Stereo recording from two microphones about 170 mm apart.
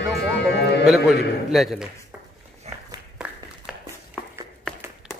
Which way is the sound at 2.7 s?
40° right (ahead or behind).